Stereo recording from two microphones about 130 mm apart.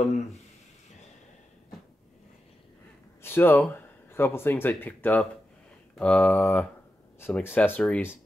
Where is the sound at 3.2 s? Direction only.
15° left (ahead or behind).